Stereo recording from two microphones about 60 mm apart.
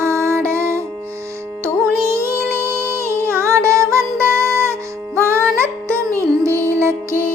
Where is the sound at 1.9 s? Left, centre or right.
Right.